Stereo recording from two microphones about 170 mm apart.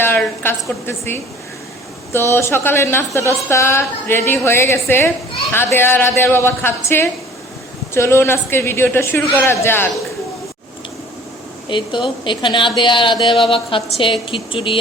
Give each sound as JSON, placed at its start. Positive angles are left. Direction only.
{"t": 0.0, "sound": "speech", "side_deg": 10}
{"t": 11.7, "sound": "a woman's voice", "side_deg": 30}